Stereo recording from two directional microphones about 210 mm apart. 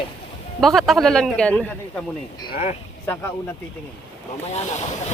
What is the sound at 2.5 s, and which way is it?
Speech, 35° left (ahead or behind).